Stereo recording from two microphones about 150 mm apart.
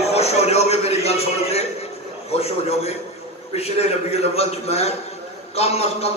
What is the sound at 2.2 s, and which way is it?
A man's voice, 45° left (ahead or behind).